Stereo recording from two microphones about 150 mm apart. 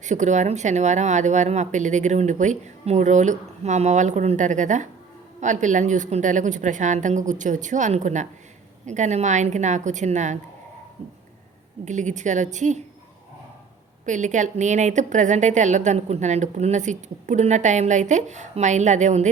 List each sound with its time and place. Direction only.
0.0 s a woman's voice: 55° right (ahead or behind)
11.9 s a woman's voice: 55° right (ahead or behind)
14.0 s a woman's voice: 55° right (ahead or behind)